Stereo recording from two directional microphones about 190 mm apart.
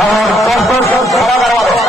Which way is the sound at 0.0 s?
Centre (ahead or behind).